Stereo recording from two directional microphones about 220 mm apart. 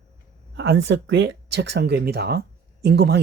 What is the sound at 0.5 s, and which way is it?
Speech, 55° right (ahead or behind).